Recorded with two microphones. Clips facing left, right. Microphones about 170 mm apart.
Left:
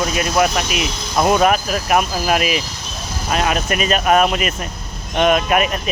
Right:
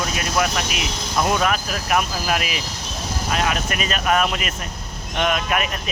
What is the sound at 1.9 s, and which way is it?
Speech, 20° left (ahead or behind).